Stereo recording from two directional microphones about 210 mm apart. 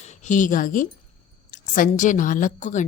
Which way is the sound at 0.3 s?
40° left (ahead or behind).